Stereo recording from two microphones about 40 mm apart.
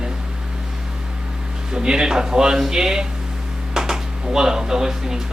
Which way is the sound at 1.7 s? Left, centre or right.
Centre.